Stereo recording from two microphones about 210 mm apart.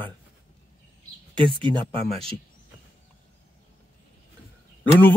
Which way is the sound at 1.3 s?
25° right (ahead or behind).